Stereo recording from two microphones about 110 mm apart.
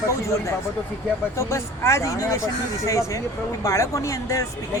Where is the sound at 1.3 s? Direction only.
25° left (ahead or behind).